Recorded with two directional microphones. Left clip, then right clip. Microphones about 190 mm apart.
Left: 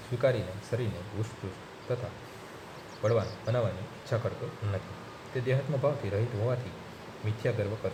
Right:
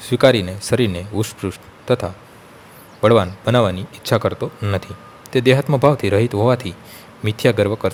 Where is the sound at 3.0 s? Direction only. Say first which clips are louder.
Right 15 dB; 55° right (ahead or behind).